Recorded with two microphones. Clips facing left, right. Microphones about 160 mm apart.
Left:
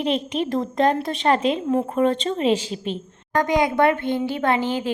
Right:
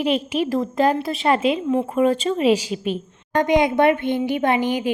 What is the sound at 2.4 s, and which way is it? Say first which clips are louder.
Speech: right 2 dB; 10° right (ahead or behind).